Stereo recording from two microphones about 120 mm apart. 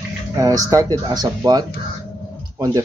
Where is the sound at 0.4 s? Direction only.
30° right (ahead or behind).